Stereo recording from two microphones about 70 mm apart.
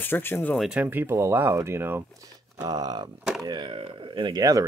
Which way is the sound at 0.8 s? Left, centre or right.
Right.